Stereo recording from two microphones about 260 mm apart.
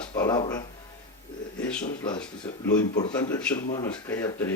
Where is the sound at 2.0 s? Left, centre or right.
Centre.